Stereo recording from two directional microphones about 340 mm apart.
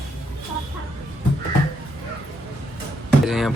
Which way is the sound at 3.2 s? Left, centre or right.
Centre.